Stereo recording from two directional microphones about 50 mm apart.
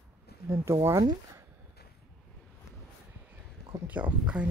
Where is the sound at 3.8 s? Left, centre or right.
Right.